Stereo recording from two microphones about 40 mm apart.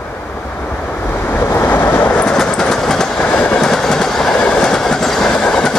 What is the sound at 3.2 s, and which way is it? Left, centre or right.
Train, left.